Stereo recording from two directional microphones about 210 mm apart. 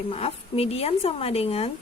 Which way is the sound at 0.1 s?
30° left (ahead or behind).